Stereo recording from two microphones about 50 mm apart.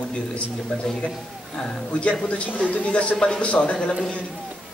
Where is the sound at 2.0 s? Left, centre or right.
Left.